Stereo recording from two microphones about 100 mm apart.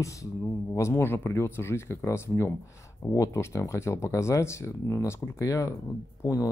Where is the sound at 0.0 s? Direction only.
30° left (ahead or behind).